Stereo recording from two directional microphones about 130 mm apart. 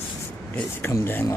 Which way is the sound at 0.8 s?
15° left (ahead or behind).